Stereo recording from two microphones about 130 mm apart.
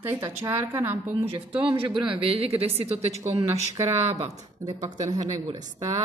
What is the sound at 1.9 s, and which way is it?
Speech, 40° right (ahead or behind).